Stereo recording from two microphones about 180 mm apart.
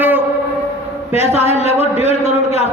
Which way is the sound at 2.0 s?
35° left (ahead or behind).